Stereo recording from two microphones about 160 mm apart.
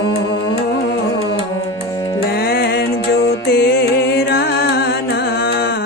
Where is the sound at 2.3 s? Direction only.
75° left (ahead or behind).